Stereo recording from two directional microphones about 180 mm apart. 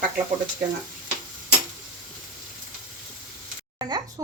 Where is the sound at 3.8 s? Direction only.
25° right (ahead or behind).